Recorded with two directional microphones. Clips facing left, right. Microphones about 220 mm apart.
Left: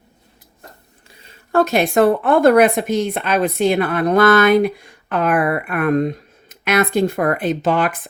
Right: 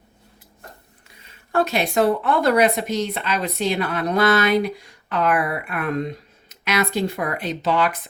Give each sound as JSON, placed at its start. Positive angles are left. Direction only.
{"t": 1.5, "sound": "speech", "side_deg": 45}